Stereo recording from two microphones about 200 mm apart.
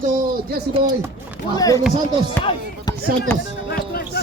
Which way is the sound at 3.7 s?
50° left (ahead or behind).